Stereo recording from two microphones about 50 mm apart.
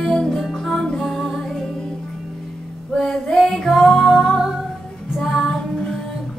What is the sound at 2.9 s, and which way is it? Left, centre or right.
Female singing, centre.